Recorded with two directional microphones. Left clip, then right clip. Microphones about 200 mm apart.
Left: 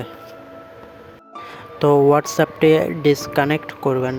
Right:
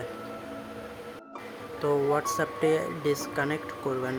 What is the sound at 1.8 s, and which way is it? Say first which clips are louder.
Speech: left 12 dB; 40° left (ahead or behind).